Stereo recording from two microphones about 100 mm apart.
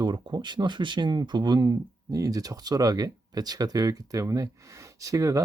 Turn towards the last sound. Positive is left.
turn(degrees=-35)  # may be behind; listen again after turning